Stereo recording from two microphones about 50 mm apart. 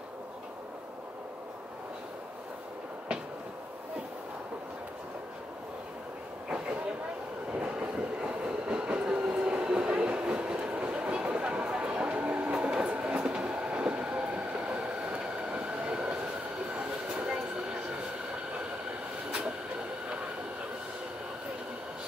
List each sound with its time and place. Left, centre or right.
7.5 s train: centre